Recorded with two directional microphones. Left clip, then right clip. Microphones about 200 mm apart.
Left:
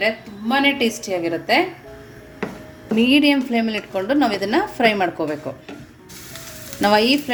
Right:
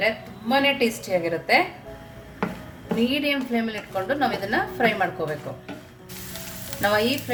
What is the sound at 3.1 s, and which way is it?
A woman's voice, 35° left (ahead or behind).